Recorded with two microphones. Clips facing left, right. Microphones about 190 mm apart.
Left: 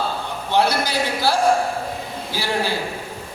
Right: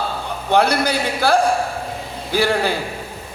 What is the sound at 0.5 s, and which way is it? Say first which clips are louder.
A man's voice: right 3 dB; 55° right (ahead or behind).